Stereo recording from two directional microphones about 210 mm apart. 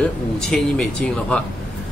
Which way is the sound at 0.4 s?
5° left (ahead or behind).